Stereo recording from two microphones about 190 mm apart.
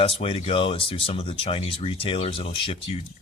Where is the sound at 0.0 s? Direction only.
30° left (ahead or behind).